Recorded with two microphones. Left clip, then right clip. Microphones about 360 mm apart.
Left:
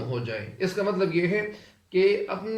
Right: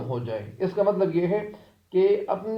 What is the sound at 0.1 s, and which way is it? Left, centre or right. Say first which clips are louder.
A man's voice: right 1 dB; centre.